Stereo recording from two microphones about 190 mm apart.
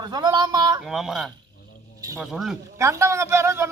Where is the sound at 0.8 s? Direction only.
Centre (ahead or behind).